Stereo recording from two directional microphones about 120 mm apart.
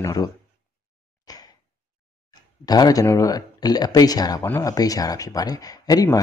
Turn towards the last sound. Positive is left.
turn(degrees=30)  # may be behind; listen again after turning